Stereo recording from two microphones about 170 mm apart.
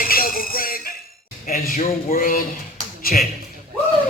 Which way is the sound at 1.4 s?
55° left (ahead or behind).